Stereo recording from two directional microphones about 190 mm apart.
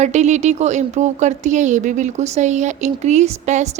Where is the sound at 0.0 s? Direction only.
35° right (ahead or behind).